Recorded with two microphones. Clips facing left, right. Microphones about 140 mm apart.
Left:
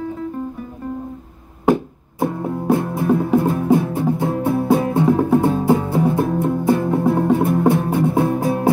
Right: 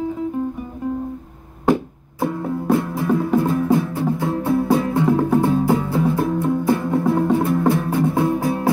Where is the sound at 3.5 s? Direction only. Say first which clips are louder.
Left 2 dB; 20° left (ahead or behind).